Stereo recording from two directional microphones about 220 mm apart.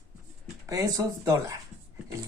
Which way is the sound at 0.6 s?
15° right (ahead or behind).